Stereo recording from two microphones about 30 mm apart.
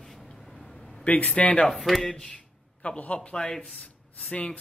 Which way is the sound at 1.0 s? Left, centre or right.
Left.